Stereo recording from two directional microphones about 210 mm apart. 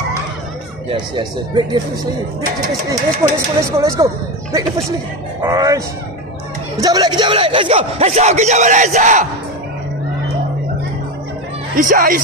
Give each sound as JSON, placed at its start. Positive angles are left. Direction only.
{"t": 0.9, "sound": "speech", "side_deg": -20}
{"t": 3.2, "sound": "speech", "side_deg": -10}
{"t": 6.8, "sound": "speech", "side_deg": -20}
{"t": 11.7, "sound": "speech", "side_deg": -40}